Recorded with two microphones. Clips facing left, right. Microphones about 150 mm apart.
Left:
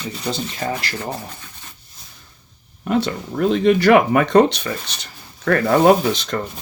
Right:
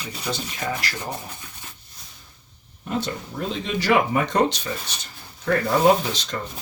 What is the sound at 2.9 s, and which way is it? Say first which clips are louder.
Speech: left 7 dB; 65° left (ahead or behind).